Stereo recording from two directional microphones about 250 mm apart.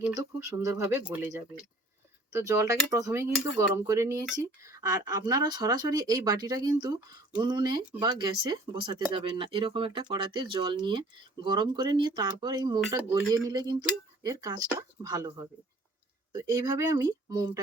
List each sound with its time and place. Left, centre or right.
0.1 s speech: centre